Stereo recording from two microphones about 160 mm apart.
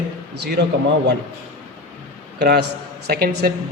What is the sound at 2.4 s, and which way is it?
Speech, 90° right.